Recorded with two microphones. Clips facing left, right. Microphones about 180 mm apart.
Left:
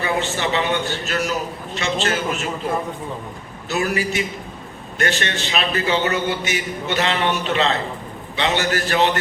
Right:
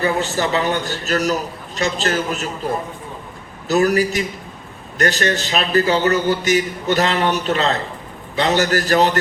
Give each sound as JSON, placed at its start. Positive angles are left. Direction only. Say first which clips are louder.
{"t": 0.0, "sound": "a man's voice", "louder": "right 3 dB", "side_deg": -40}
{"t": 3.7, "sound": "a man's voice", "louder": "right 6 dB", "side_deg": -40}